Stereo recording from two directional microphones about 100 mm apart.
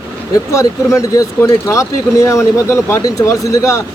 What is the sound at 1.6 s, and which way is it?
Speech, 30° left (ahead or behind).